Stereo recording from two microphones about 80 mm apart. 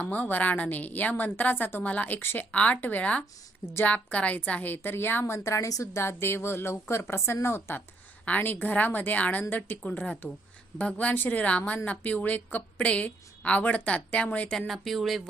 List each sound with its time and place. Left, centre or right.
0.0 s a woman's voice: left
5.2 s a woman's voice: left; by 14.6 s centre
14.7 s speech: centre